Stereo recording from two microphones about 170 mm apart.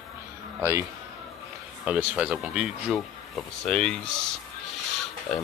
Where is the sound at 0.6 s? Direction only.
15° right (ahead or behind).